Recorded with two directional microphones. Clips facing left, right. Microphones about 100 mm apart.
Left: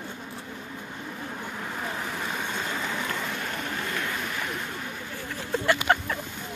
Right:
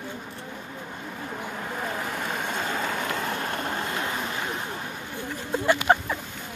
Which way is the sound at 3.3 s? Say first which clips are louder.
Right 3 dB; 35° right (ahead or behind).